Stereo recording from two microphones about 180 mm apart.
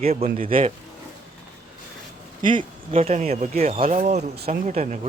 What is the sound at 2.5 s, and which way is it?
Speech, 30° right (ahead or behind).